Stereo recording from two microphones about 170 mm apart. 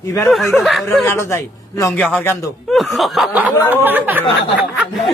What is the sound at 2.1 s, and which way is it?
Speech, 5° left (ahead or behind).